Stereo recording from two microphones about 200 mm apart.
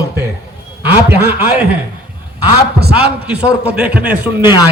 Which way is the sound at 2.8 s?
55° right (ahead or behind).